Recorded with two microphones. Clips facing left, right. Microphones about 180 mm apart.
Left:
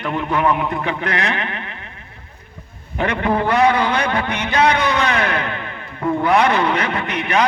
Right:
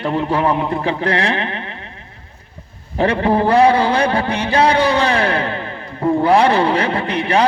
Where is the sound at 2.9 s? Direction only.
30° right (ahead or behind).